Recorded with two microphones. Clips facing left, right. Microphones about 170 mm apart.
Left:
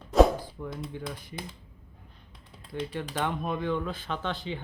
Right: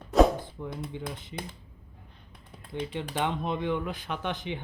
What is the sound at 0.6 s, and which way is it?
Speech, 15° right (ahead or behind).